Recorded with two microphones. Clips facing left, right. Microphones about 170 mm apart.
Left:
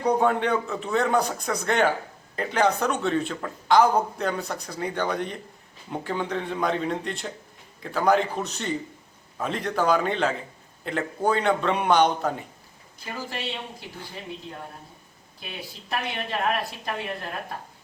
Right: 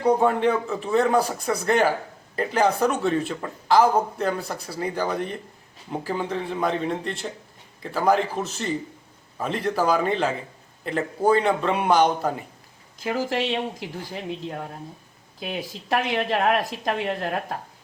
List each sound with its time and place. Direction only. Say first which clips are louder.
0.0 s a man's voice: right 3 dB; 5° right (ahead or behind)
13.0 s speech: right 9 dB; 90° right
15.9 s speech: right 7 dB; 90° right; by 17.6 s 55° right (ahead or behind)